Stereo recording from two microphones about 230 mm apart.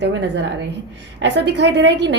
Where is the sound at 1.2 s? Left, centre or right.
Right.